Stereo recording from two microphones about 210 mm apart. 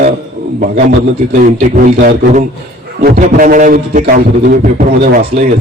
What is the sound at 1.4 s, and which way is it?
A man's voice, 40° right (ahead or behind).